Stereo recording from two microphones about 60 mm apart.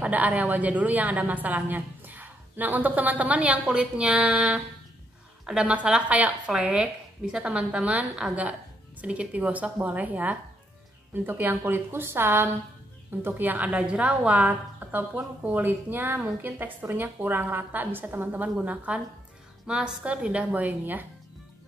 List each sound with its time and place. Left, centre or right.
0.0 s a woman's voice: right
6.5 s a woman's voice: centre; by 12.4 s right
13.2 s a woman's voice: right
19.6 s a woman's voice: centre; by 21.1 s right